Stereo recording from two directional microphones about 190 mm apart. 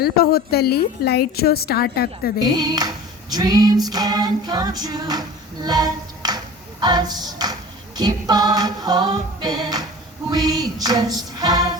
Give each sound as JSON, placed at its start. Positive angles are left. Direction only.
{"t": 0.0, "sound": "a woman's voice", "side_deg": 55}
{"t": 2.6, "sound": "music", "side_deg": -20}